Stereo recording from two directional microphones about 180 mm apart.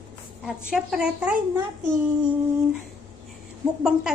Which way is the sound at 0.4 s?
5° right (ahead or behind).